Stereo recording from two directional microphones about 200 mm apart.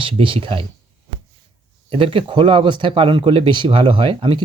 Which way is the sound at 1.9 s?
25° right (ahead or behind).